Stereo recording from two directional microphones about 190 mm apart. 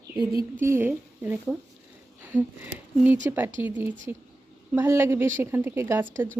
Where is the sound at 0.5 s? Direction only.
10° right (ahead or behind).